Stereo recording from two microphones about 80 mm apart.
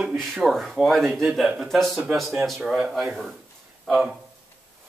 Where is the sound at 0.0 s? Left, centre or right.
Centre.